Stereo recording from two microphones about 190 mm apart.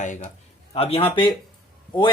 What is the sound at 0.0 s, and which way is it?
Speech, 40° left (ahead or behind).